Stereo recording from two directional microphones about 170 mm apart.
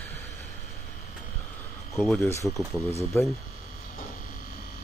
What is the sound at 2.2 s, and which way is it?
Speech, 15° left (ahead or behind).